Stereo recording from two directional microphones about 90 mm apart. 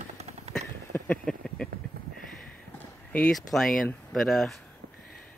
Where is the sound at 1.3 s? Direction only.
5° left (ahead or behind).